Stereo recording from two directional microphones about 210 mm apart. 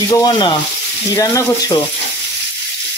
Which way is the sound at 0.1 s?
20° left (ahead or behind).